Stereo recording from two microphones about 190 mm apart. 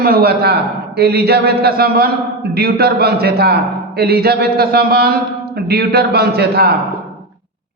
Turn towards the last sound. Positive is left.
turn(degrees=-55)  # may be behind; listen again after turning